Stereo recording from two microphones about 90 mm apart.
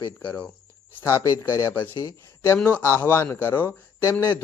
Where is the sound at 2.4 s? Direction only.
25° left (ahead or behind).